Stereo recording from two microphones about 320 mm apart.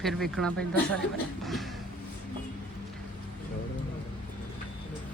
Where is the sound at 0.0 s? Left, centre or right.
Centre.